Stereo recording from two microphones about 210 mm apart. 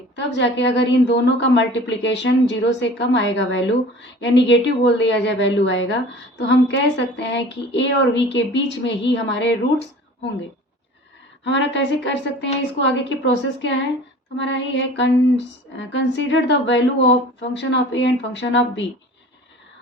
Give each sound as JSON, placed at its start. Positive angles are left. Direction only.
{"t": 0.2, "sound": "a woman's voice", "side_deg": 60}
{"t": 11.4, "sound": "a woman's voice", "side_deg": 60}